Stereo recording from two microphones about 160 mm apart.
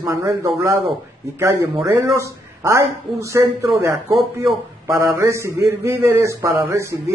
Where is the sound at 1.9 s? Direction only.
20° right (ahead or behind).